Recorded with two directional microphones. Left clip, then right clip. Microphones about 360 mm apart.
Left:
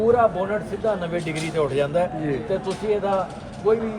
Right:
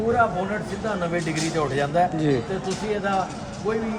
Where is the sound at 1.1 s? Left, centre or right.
Centre.